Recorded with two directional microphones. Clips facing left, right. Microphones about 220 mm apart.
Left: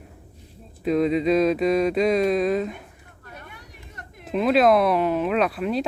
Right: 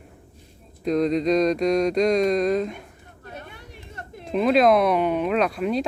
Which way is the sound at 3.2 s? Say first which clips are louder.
Right 4 dB; 25° right (ahead or behind).